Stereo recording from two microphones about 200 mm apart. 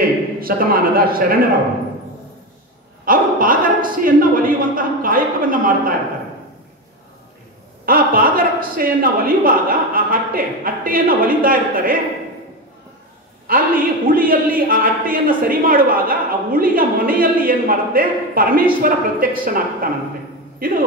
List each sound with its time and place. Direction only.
0.4 s a man's voice: 45° right (ahead or behind)
3.1 s a man's voice: 45° right (ahead or behind)
7.8 s a man's voice: 45° right (ahead or behind)
13.5 s a man's voice: 45° right (ahead or behind)